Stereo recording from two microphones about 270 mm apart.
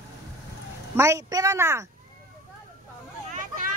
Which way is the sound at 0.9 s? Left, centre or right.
Centre.